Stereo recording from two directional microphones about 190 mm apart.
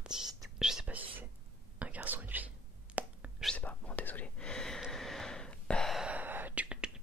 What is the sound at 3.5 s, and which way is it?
Whispering, 10° left (ahead or behind).